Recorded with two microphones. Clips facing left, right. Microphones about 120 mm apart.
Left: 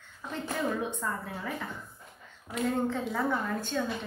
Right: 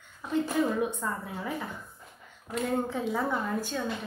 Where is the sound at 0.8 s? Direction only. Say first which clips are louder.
Right 1 dB; 10° right (ahead or behind).